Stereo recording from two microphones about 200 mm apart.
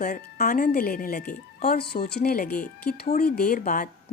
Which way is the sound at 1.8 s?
55° left (ahead or behind).